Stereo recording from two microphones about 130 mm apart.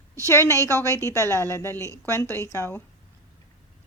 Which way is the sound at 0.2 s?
20° left (ahead or behind).